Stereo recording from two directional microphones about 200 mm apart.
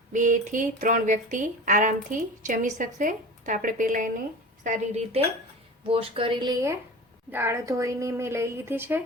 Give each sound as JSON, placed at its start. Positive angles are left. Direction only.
{"t": 0.1, "sound": "speech", "side_deg": -40}
{"t": 5.9, "sound": "a woman's voice", "side_deg": -25}